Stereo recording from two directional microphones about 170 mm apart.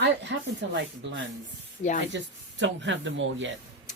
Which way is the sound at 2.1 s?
90° right.